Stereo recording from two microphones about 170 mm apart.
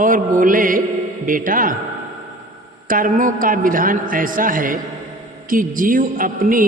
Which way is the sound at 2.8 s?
55° right (ahead or behind).